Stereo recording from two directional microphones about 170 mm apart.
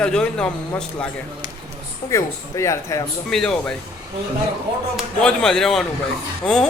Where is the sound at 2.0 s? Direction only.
20° left (ahead or behind).